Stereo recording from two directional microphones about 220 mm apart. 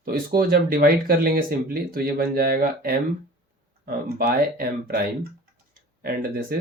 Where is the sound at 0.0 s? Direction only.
40° right (ahead or behind).